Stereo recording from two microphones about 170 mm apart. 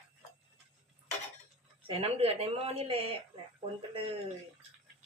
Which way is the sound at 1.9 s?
35° right (ahead or behind).